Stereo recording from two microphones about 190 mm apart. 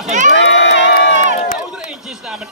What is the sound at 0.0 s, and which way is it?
Crowd, 40° right (ahead or behind).